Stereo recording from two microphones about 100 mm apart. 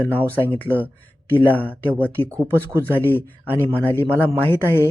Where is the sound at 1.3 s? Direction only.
15° left (ahead or behind).